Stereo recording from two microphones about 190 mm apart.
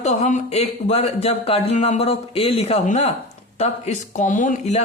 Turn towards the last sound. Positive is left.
turn(degrees=40)  # may be behind; listen again after turning